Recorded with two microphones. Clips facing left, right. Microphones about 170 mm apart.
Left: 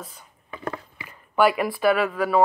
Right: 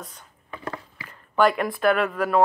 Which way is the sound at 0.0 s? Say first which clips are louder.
Left 1 dB; 5° left (ahead or behind).